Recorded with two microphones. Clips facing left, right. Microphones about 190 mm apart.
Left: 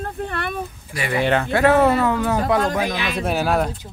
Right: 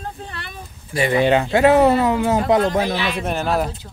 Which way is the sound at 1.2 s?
15° right (ahead or behind).